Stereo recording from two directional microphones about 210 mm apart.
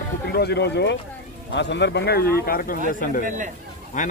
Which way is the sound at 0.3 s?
50° left (ahead or behind).